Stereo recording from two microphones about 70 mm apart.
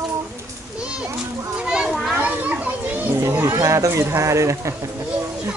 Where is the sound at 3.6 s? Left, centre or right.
Right.